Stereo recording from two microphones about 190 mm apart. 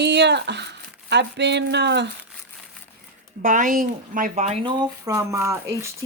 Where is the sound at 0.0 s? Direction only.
65° right (ahead or behind).